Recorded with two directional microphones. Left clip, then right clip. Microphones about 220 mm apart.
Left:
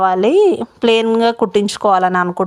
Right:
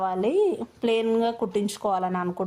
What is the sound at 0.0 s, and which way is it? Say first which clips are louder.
Speech: left 12 dB; 25° left (ahead or behind).